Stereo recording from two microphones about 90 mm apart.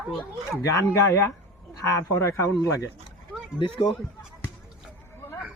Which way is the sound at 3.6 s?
70° left (ahead or behind).